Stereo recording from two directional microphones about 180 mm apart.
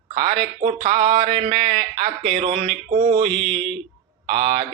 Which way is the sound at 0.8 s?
50° right (ahead or behind).